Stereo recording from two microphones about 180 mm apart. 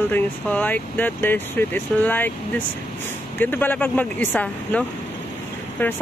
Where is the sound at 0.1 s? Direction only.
10° left (ahead or behind).